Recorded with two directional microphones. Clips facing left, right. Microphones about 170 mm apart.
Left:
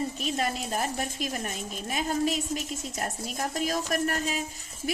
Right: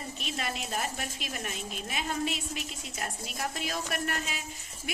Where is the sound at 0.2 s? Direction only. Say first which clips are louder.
Left 6 dB; 40° left (ahead or behind).